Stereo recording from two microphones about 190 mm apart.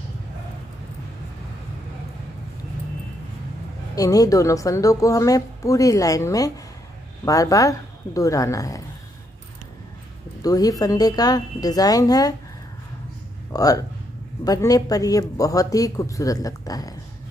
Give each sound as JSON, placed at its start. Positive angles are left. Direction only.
{"t": 3.9, "sound": "a woman's voice", "side_deg": 20}
{"t": 10.4, "sound": "speech", "side_deg": 20}
{"t": 13.5, "sound": "speech", "side_deg": 20}